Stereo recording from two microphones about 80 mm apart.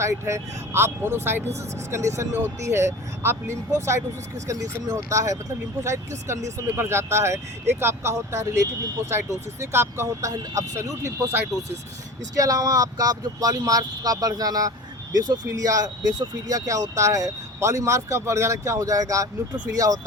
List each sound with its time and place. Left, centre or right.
0.0 s speech: right
12.4 s speech: right